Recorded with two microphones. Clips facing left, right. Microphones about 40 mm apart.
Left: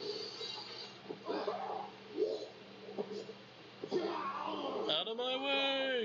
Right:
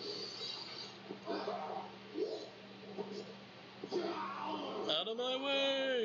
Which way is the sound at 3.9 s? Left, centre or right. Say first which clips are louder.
Left 2 dB; left.